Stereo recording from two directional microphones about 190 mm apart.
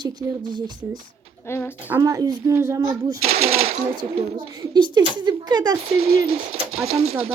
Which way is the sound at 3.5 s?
35° right (ahead or behind).